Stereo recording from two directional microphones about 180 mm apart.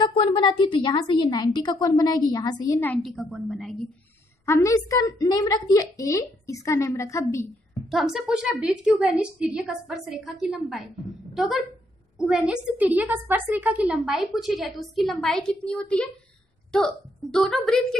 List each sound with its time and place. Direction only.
0.0 s a woman's voice: 30° left (ahead or behind); by 3.7 s centre (ahead or behind)
4.5 s a woman's voice: 15° left (ahead or behind)
7.9 s a woman's voice: centre (ahead or behind)